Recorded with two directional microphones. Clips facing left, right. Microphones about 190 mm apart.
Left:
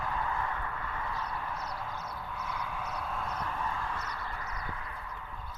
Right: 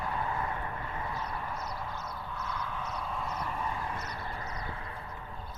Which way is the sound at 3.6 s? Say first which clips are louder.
Even; 15° right (ahead or behind).